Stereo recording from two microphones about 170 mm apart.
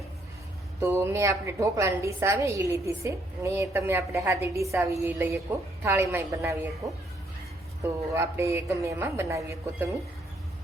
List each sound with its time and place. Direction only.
0.8 s a woman's voice: 15° right (ahead or behind)
8.1 s a woman's voice: 15° right (ahead or behind)